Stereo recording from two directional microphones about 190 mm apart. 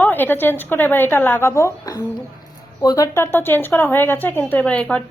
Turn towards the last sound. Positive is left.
turn(degrees=5)  # may be behind; listen again after turning